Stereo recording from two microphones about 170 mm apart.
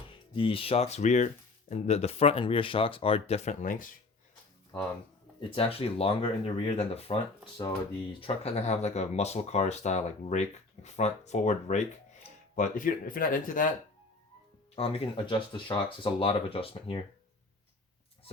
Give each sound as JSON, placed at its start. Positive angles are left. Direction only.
{"t": 0.1, "sound": "speech", "side_deg": 30}
{"t": 5.4, "sound": "speech", "side_deg": 35}
{"t": 14.8, "sound": "speech", "side_deg": 35}